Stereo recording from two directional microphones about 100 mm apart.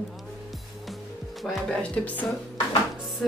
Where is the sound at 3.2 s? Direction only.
Centre (ahead or behind).